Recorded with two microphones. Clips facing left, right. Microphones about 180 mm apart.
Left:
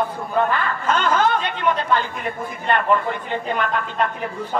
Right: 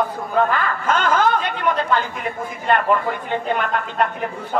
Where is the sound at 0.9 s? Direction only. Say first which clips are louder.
Right 1 dB; 50° right (ahead or behind).